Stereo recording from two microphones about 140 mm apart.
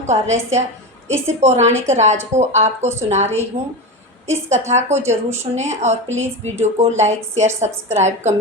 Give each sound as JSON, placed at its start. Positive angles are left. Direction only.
{"t": 0.0, "sound": "a woman's voice", "side_deg": -55}